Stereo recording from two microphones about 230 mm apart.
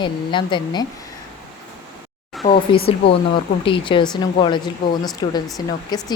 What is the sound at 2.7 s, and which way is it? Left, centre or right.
Speech, left.